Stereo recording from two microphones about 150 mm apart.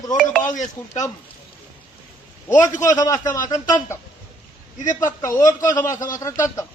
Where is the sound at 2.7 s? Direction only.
25° left (ahead or behind).